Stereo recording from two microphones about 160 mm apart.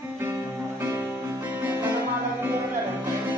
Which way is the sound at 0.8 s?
15° right (ahead or behind).